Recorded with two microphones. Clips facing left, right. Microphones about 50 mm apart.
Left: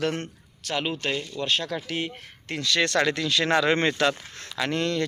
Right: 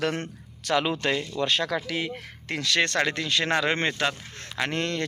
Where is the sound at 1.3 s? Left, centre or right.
Right.